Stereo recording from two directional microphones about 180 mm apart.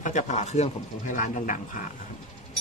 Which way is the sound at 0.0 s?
40° left (ahead or behind).